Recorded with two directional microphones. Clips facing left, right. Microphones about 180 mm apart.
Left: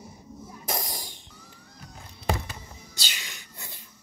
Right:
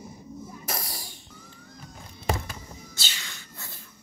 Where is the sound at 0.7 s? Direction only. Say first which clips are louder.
Left 3 dB; 20° left (ahead or behind).